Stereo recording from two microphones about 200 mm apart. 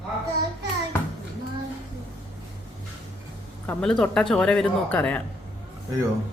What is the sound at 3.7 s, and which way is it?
Speech, 5° left (ahead or behind).